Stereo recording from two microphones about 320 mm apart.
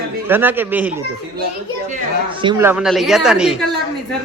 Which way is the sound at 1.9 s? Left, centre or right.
Centre.